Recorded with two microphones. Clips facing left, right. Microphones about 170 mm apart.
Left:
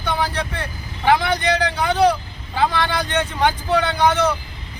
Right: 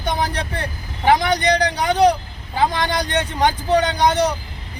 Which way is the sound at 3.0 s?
40° right (ahead or behind).